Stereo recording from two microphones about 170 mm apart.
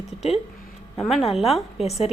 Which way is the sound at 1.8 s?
40° left (ahead or behind).